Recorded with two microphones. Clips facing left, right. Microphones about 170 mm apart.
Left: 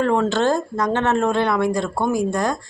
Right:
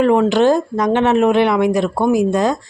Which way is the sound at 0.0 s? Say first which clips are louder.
Right 6 dB; 15° right (ahead or behind).